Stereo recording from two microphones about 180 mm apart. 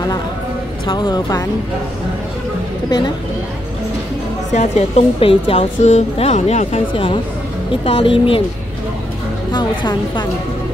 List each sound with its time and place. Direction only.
0.8 s a woman's voice: 25° left (ahead or behind)
4.6 s a woman's voice: 40° left (ahead or behind)
9.5 s a woman's voice: 25° left (ahead or behind)